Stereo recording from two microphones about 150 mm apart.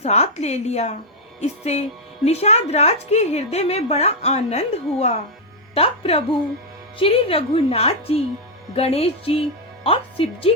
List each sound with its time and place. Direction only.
0.0 s a woman's voice: 45° left (ahead or behind)